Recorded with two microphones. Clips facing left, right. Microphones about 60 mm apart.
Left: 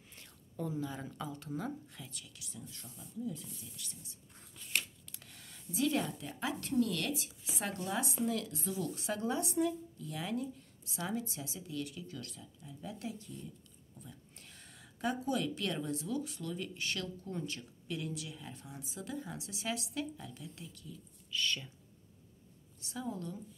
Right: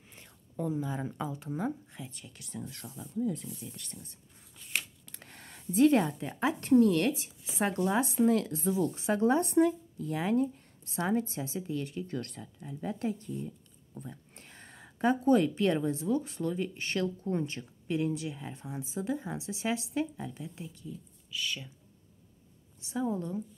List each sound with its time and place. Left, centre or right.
0.1 s whispering: centre
1.4 s speech: right
2.3 s speech: right
2.6 s speech: right
3.6 s speech: right
8.6 s speech: right
9.3 s speech: right
21.3 s speech: centre
22.8 s speech: right